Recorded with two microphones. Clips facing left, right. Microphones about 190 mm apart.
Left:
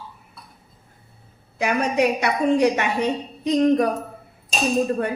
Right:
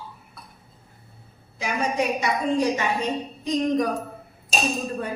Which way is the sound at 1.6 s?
65° left (ahead or behind).